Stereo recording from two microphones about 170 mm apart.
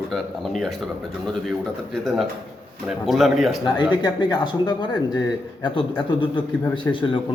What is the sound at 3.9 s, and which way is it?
Speech, 25° left (ahead or behind).